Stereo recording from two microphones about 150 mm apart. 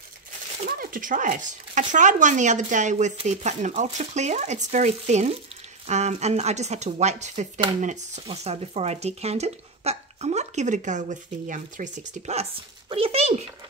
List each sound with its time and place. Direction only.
0.7 s speech: 65° right (ahead or behind)
12.9 s speech: 40° right (ahead or behind)